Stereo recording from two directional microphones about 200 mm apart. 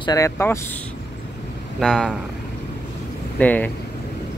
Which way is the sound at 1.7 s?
Centre (ahead or behind).